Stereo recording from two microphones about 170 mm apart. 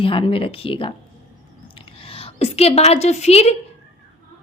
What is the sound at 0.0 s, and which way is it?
Speech, 30° left (ahead or behind).